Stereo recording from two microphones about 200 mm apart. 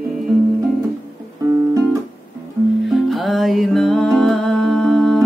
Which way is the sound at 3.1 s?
Centre (ahead or behind).